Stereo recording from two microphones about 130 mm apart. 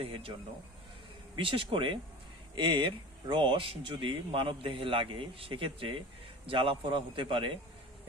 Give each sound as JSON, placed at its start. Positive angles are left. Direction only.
{"t": 0.0, "sound": "speech", "side_deg": -45}
{"t": 1.4, "sound": "speech", "side_deg": -40}